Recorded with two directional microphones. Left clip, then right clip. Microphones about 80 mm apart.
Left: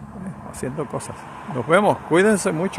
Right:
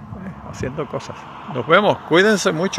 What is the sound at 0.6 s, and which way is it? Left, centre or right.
Speech, left.